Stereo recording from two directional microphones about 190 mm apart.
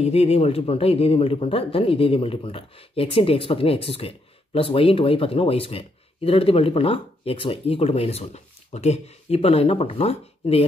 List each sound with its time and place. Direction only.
0.0 s a man's voice: 35° left (ahead or behind)